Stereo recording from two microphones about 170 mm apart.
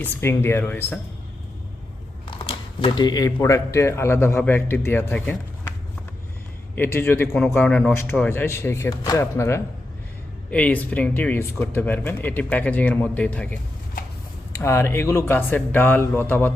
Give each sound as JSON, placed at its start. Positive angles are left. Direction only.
{"t": 0.0, "sound": "speech", "side_deg": 15}
{"t": 2.2, "sound": "speech", "side_deg": 30}
{"t": 6.7, "sound": "speech", "side_deg": 15}